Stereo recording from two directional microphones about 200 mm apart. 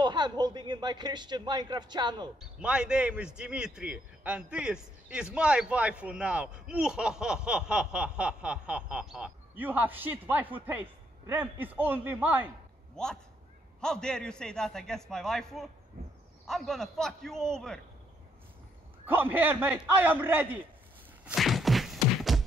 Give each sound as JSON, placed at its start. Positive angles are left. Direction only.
{"t": 0.0, "sound": "speech", "side_deg": -20}
{"t": 2.6, "sound": "a man's voice", "side_deg": -5}
{"t": 12.9, "sound": "a man's voice", "side_deg": 5}
{"t": 16.0, "sound": "speech", "side_deg": -50}
{"t": 16.4, "sound": "a man's voice", "side_deg": 0}
{"t": 19.0, "sound": "a man's voice", "side_deg": -10}
{"t": 21.3, "sound": "beatboxing", "side_deg": 0}